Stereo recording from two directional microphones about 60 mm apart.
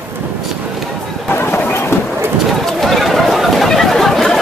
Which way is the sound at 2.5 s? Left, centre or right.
Centre.